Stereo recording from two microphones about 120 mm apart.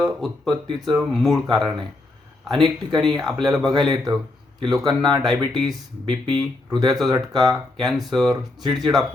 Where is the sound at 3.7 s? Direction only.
35° right (ahead or behind).